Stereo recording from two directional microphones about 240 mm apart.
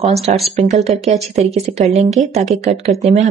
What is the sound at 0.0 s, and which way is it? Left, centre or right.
Speech, right.